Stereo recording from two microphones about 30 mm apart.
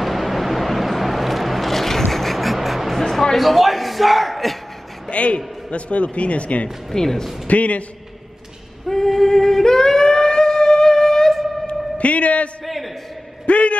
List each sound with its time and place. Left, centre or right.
0.0 s vehicle: centre
3.0 s music: centre
3.3 s speech: centre
5.1 s a man's voice: left
6.9 s speech: centre
7.4 s speech: left
8.8 s female singing: centre
9.3 s humming: centre
9.7 s a sound: centre
11.6 s a sound: left
12.6 s a sound: centre
13.5 s speech: left